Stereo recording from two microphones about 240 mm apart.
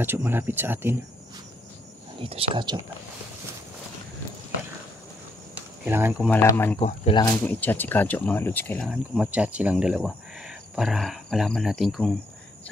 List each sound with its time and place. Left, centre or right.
0.0 s speech: centre
2.2 s speech: right
5.9 s speech: centre
6.3 s speech: centre
6.8 s speech: left
7.4 s speech: centre